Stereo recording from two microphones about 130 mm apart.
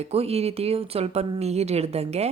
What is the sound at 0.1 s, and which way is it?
Speech, 50° right (ahead or behind).